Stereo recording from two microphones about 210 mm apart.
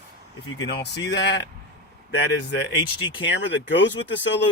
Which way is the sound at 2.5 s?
60° left (ahead or behind).